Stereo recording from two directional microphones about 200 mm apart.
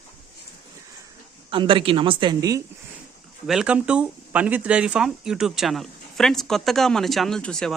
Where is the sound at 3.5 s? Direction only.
5° right (ahead or behind).